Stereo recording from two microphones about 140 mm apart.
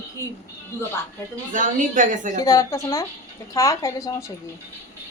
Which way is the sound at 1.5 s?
70° right (ahead or behind).